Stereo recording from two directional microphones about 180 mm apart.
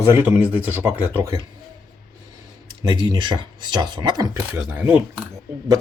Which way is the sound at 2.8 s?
20° right (ahead or behind).